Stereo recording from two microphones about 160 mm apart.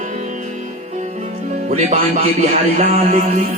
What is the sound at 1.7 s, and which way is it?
A man's voice, 45° right (ahead or behind).